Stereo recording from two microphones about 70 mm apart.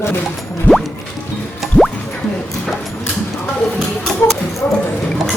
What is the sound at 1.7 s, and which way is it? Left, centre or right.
Music, centre.